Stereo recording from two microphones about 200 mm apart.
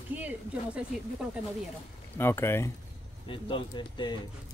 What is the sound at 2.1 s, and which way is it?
Speech, 10° left (ahead or behind).